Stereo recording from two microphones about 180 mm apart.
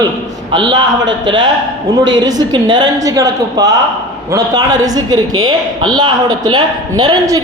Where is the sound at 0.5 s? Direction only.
25° right (ahead or behind).